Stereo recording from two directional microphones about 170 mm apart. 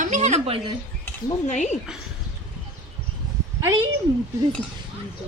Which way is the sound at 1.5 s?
45° left (ahead or behind).